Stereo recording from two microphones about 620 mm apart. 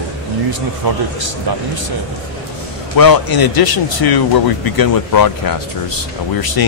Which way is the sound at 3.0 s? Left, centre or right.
Left.